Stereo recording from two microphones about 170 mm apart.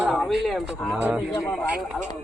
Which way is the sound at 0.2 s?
Centre (ahead or behind).